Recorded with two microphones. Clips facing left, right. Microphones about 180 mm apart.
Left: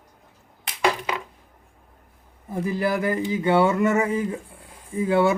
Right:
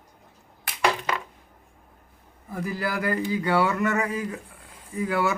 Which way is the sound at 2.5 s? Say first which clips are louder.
Left 5 dB; 25° left (ahead or behind).